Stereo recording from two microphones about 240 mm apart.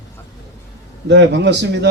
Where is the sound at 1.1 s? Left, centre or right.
Right.